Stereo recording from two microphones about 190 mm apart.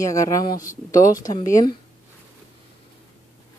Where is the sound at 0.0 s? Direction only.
15° left (ahead or behind).